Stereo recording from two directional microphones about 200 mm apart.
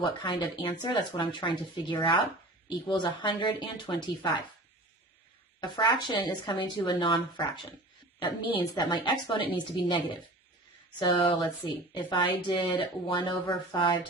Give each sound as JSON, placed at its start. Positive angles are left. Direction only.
{"t": 0.0, "sound": "speech", "side_deg": 20}
{"t": 5.5, "sound": "speech", "side_deg": 20}
{"t": 11.0, "sound": "speech", "side_deg": 25}